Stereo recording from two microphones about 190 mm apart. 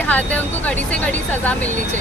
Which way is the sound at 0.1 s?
10° left (ahead or behind).